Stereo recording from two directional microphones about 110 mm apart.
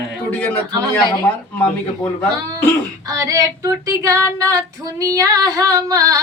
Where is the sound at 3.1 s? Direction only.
35° right (ahead or behind).